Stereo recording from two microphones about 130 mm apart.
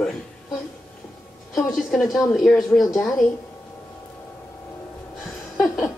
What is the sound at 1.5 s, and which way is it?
Speech, 5° left (ahead or behind).